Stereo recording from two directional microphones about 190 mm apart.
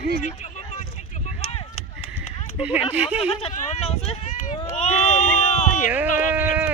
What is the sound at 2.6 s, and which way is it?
Speech, 10° right (ahead or behind).